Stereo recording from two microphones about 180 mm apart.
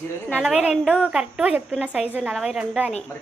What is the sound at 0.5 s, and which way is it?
A woman's voice, 5° right (ahead or behind).